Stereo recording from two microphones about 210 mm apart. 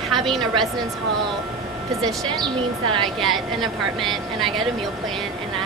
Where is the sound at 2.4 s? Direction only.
20° right (ahead or behind).